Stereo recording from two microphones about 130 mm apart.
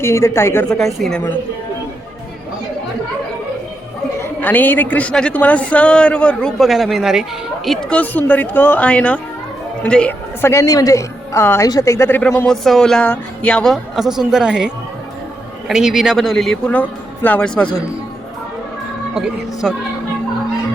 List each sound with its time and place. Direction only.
0.0 s a woman's voice: 20° left (ahead or behind)
0.7 s speech: centre (ahead or behind)
4.2 s a woman's voice: 15° left (ahead or behind)
13.9 s speech: 5° right (ahead or behind)
19.1 s speech: 5° right (ahead or behind)